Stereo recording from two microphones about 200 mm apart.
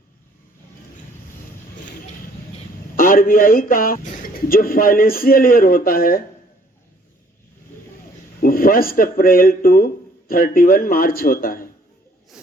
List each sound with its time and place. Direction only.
2.9 s speech: 45° left (ahead or behind)
8.4 s speech: 45° left (ahead or behind)